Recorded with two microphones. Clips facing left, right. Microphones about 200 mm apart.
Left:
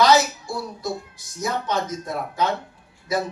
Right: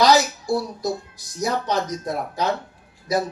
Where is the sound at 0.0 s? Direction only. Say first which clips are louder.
Even; 35° right (ahead or behind).